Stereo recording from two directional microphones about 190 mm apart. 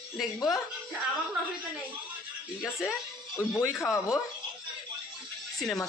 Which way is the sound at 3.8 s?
15° left (ahead or behind).